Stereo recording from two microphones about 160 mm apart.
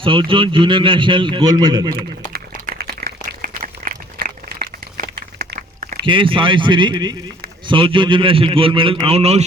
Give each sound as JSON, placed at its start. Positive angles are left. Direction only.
{"t": 0.0, "sound": "a man's voice", "side_deg": -30}
{"t": 2.0, "sound": "a sound", "side_deg": -65}
{"t": 6.1, "sound": "a man's voice", "side_deg": -30}